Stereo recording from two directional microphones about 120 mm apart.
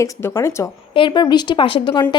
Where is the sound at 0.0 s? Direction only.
20° left (ahead or behind).